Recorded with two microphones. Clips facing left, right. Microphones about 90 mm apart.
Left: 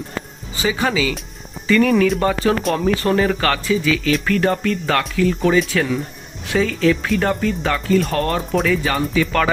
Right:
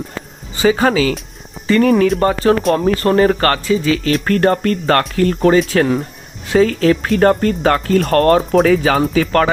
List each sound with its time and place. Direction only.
0.6 s speech: 45° right (ahead or behind)